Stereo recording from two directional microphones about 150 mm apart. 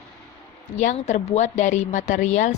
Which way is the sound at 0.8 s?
50° left (ahead or behind).